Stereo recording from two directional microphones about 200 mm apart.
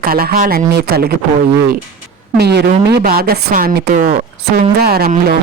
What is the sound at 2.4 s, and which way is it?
A woman's voice, 55° right (ahead or behind).